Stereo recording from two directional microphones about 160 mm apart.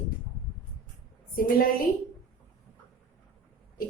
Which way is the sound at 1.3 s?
65° left (ahead or behind).